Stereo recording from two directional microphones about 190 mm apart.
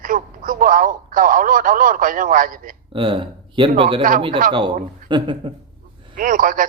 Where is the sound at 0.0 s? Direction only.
45° right (ahead or behind).